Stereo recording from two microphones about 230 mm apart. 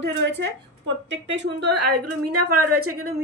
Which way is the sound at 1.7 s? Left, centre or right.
Right.